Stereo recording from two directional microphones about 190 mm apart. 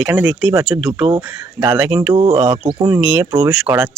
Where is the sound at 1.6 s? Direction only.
15° right (ahead or behind).